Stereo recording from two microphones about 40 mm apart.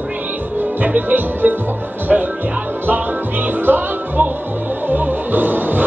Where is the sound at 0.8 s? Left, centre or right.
Right.